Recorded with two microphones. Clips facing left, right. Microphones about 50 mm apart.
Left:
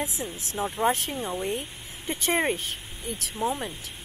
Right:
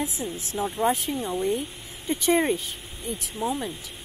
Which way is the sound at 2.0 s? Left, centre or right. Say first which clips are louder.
Right 3 dB; left.